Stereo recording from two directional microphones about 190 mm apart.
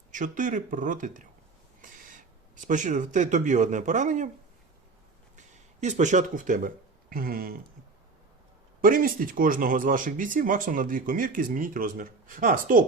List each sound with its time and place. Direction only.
0.1 s speech: 45° right (ahead or behind)
5.4 s speech: 40° right (ahead or behind)
8.8 s speech: 45° right (ahead or behind)